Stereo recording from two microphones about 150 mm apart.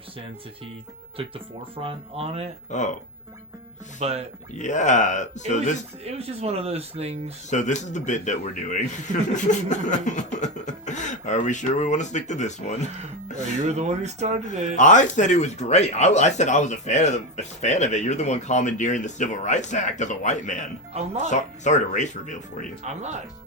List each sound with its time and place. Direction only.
1.7 s speech: 40° right (ahead or behind)
2.6 s speech: 55° left (ahead or behind)
4.0 s speech: 45° right (ahead or behind)
4.5 s speech: 55° left (ahead or behind)
6.1 s speech: 45° right (ahead or behind)
7.5 s speech: 55° left (ahead or behind)
9.3 s a sound: 55° left (ahead or behind)
13.7 s speech: 50° right (ahead or behind)
14.8 s speech: 55° left (ahead or behind)
22.8 s speech: 50° right (ahead or behind)